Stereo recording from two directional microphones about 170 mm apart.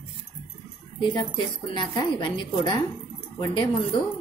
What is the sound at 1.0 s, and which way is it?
A woman's voice, 30° left (ahead or behind).